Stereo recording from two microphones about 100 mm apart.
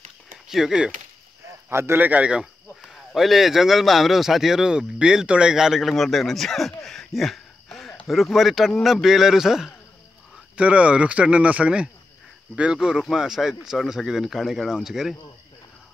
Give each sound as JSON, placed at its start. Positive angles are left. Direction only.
{"t": 0.5, "sound": "speech", "side_deg": -5}
{"t": 1.7, "sound": "speech", "side_deg": -25}
{"t": 2.9, "sound": "speech", "side_deg": 0}